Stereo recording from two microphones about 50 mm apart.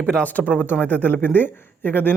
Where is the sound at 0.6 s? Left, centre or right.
Left.